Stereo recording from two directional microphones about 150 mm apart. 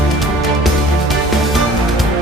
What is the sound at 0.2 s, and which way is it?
Music, centre (ahead or behind).